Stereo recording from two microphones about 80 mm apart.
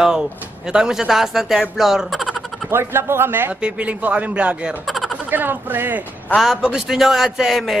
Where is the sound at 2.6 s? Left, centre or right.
Right.